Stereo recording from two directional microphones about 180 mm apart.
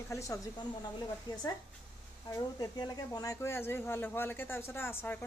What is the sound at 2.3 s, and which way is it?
Speech, 20° left (ahead or behind).